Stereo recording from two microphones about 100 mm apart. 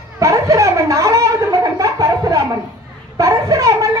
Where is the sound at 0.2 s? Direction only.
30° right (ahead or behind).